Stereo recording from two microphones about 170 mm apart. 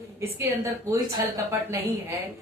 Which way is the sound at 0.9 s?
20° right (ahead or behind).